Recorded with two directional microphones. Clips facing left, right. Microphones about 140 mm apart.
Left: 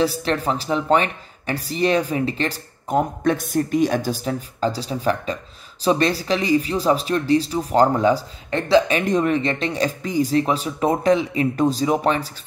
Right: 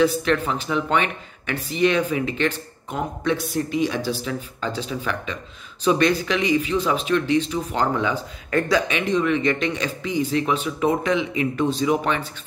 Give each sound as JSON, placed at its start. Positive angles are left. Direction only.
{"t": 0.0, "sound": "speech", "side_deg": 35}
{"t": 8.5, "sound": "speech", "side_deg": 25}
{"t": 8.9, "sound": "speech", "side_deg": 45}